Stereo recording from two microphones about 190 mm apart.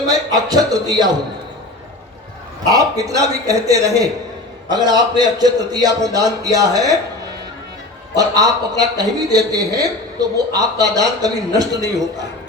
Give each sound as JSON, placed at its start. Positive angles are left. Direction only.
{"t": 0.1, "sound": "a man's voice", "side_deg": -20}
{"t": 2.6, "sound": "a man's voice", "side_deg": -20}
{"t": 8.1, "sound": "a man's voice", "side_deg": -20}